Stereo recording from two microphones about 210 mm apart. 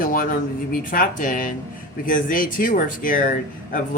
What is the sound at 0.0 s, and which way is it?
Speech, 40° left (ahead or behind).